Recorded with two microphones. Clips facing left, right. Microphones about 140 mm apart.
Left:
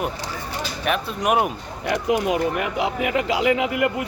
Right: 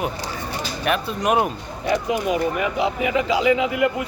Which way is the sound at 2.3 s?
85° left.